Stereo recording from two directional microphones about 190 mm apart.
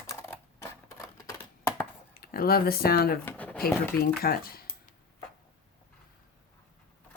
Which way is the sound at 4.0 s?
55° left (ahead or behind).